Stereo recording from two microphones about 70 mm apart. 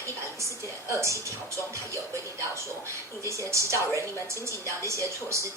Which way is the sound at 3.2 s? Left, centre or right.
Right.